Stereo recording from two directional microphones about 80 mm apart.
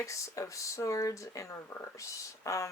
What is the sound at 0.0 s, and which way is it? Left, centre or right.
Speech, left.